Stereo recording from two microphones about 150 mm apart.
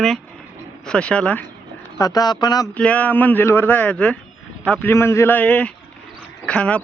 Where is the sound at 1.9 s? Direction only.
25° left (ahead or behind).